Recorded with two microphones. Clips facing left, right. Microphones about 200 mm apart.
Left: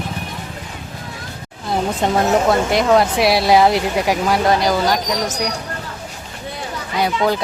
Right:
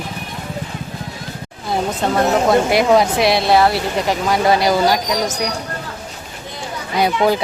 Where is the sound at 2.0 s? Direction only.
15° left (ahead or behind).